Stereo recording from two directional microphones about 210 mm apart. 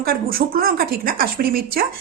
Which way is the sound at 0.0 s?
45° right (ahead or behind).